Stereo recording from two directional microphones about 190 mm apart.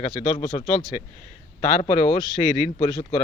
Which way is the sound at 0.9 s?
40° left (ahead or behind).